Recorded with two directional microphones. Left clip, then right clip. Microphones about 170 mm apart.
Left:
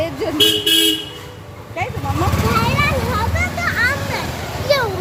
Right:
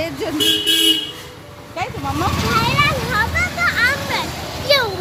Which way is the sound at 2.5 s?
Centre (ahead or behind).